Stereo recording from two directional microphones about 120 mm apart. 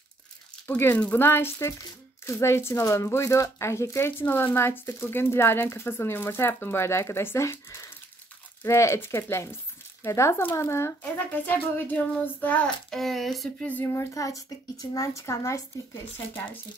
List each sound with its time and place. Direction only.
0.7 s speech: 15° left (ahead or behind)
12.9 s speech: centre (ahead or behind)
13.7 s speech: 15° left (ahead or behind)
14.1 s speech: 30° left (ahead or behind)